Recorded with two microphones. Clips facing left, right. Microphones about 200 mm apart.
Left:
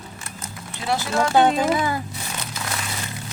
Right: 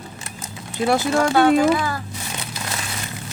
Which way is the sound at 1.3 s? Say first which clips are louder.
Right 2 dB; 20° left (ahead or behind).